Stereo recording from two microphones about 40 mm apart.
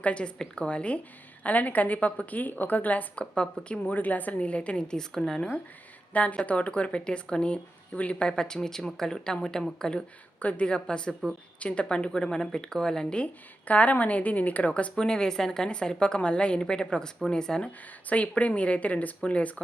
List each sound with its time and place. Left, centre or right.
0.0 s speech: left
1.5 s a woman's voice: left
3.3 s speech: left
3.8 s speech: left; by 5.4 s centre
6.4 s speech: left; by 10.0 s centre
10.4 s speech: left
13.1 s speech: left
14.9 s speech: centre
18.1 s speech: left